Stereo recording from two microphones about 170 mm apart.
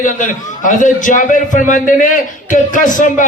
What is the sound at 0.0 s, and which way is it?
A man's voice, 50° left (ahead or behind).